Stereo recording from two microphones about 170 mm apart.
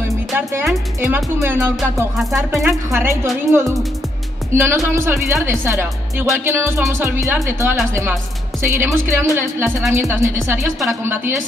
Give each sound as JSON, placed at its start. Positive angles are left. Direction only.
{"t": 1.0, "sound": "speech", "side_deg": -15}
{"t": 2.1, "sound": "music", "side_deg": 0}
{"t": 2.9, "sound": "a woman's voice", "side_deg": -15}